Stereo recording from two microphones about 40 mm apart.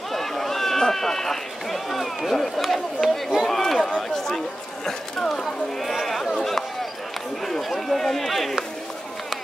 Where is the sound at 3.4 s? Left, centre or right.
Centre.